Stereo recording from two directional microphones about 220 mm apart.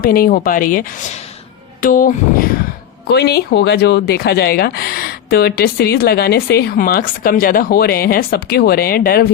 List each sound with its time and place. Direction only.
0.0 s speech: 40° left (ahead or behind)